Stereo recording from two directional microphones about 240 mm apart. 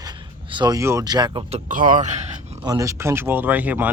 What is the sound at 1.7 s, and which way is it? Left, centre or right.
Speech, right.